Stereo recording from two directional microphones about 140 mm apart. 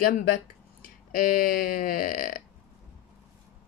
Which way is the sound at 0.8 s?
90° left.